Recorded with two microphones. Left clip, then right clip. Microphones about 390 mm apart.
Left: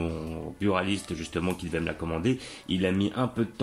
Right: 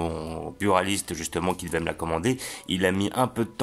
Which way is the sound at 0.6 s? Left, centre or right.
Centre.